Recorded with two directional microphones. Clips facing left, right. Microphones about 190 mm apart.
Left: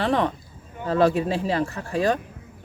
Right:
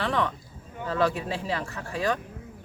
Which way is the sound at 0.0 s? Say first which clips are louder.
Left 5 dB; 35° left (ahead or behind).